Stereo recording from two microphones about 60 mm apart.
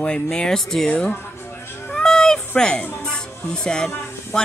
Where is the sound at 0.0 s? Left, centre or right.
Centre.